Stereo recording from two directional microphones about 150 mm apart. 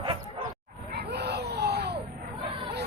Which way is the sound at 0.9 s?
90° right.